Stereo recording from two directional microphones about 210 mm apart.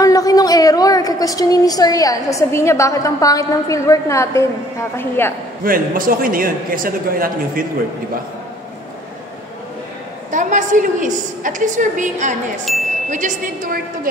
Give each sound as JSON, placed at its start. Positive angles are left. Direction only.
{"t": 0.0, "sound": "a woman's voice", "side_deg": 15}
{"t": 5.6, "sound": "a man's voice", "side_deg": -40}
{"t": 10.3, "sound": "a woman's voice", "side_deg": -35}